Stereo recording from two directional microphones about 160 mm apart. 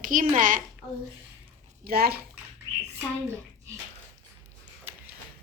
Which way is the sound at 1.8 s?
70° right (ahead or behind).